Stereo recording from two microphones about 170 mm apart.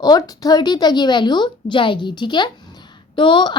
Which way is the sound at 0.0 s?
20° left (ahead or behind).